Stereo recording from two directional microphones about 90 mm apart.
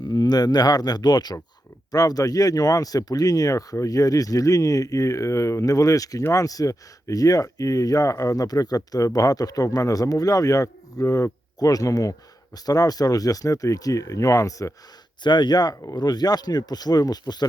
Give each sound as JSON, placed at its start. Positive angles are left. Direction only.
{"t": 0.0, "sound": "speech", "side_deg": 50}
{"t": 15.2, "sound": "speech", "side_deg": 55}